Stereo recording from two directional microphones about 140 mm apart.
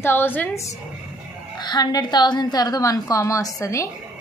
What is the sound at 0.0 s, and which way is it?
Speech, 15° left (ahead or behind).